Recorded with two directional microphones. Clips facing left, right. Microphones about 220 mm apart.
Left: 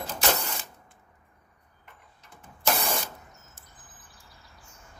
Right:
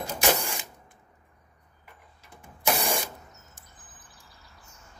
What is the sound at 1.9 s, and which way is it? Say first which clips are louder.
Vehicle: right 1 dB; 10° right (ahead or behind).